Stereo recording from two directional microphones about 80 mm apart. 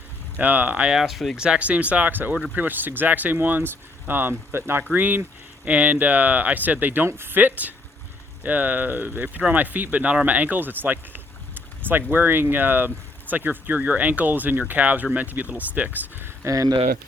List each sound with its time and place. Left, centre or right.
0.3 s speech: right
0.9 s speech: centre
1.4 s speech: centre; by 16.5 s right
16.5 s speech: right